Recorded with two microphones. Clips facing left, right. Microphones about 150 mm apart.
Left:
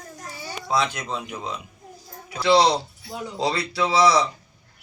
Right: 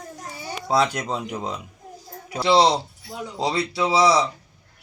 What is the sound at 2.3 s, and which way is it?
A man's voice, 30° right (ahead or behind).